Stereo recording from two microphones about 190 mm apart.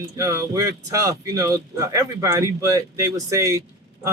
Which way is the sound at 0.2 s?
15° right (ahead or behind).